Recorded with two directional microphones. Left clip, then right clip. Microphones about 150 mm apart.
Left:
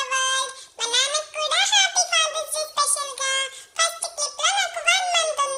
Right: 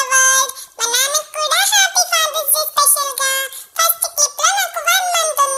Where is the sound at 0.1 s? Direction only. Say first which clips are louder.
Right 11 dB; 40° right (ahead or behind).